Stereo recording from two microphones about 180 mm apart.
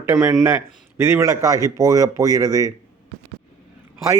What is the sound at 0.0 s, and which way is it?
Speech, 10° right (ahead or behind).